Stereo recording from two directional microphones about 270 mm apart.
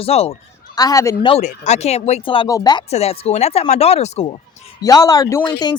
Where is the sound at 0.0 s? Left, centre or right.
Left.